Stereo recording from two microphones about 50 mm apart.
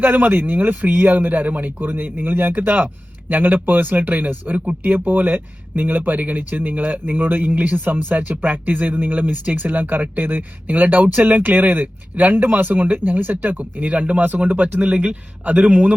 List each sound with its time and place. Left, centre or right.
0.0 s a man's voice: right